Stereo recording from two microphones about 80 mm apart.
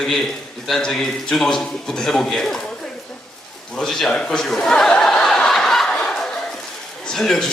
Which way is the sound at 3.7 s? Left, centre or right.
Centre.